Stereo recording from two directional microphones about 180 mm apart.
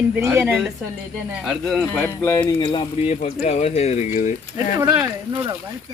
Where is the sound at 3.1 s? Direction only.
40° left (ahead or behind).